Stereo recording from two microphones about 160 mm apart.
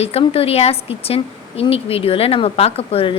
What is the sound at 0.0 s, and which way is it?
A woman's voice, 40° left (ahead or behind).